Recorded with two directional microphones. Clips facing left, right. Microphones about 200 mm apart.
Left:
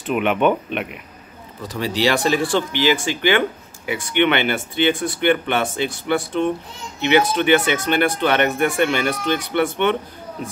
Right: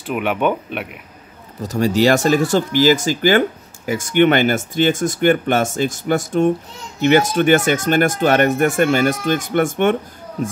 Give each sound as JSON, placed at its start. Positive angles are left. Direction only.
{"t": 0.0, "sound": "speech", "side_deg": -5}
{"t": 1.6, "sound": "speech", "side_deg": -45}